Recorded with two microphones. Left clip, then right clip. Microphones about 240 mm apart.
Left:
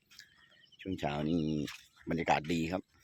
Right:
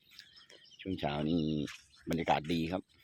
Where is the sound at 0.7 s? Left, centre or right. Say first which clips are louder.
Even; centre.